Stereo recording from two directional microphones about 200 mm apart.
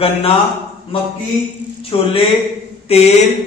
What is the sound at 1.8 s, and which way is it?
A man's voice, 30° left (ahead or behind).